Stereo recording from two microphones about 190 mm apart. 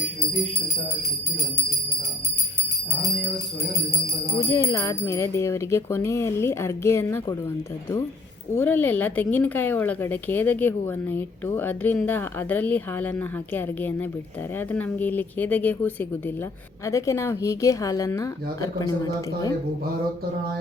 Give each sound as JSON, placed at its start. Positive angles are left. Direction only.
{"t": 4.4, "sound": "speech", "side_deg": 15}
{"t": 8.5, "sound": "speech", "side_deg": 10}